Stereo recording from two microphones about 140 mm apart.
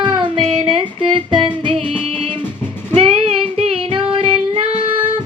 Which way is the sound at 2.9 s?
45° right (ahead or behind).